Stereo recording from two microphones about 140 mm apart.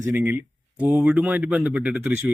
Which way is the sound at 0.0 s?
15° right (ahead or behind).